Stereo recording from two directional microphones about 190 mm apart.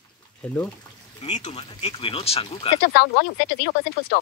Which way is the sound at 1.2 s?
35° left (ahead or behind).